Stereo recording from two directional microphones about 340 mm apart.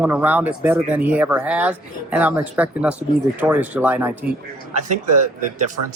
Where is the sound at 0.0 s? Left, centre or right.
Centre.